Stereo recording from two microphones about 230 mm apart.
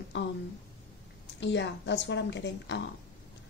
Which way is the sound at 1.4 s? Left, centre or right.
Left.